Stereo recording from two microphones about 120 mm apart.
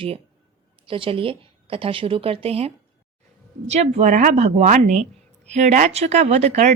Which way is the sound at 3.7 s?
65° right (ahead or behind).